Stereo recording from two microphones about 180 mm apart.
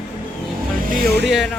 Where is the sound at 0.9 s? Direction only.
60° right (ahead or behind).